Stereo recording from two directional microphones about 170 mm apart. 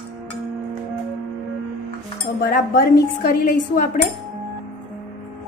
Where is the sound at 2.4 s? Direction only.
60° left (ahead or behind).